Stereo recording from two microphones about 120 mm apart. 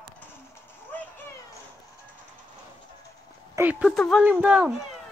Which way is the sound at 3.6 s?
15° right (ahead or behind).